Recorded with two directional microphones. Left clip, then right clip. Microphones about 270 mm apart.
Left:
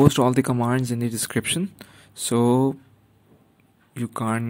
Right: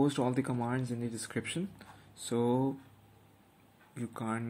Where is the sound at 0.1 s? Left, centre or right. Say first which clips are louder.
Left 12 dB; left.